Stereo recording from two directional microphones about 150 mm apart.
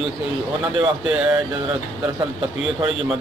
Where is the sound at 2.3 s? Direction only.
35° right (ahead or behind).